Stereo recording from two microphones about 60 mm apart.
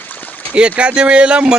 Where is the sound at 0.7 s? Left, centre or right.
Centre.